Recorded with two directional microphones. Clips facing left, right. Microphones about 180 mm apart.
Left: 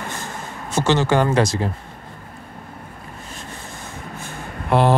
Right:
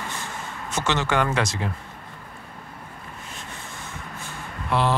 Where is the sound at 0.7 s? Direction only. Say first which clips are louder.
Left 6 dB; 30° left (ahead or behind).